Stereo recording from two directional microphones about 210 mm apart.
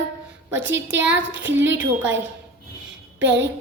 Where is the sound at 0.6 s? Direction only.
60° right (ahead or behind).